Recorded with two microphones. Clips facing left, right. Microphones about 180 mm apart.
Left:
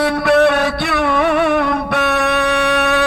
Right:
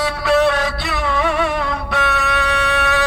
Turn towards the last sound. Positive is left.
turn(degrees=60)  # may be behind; listen again after turning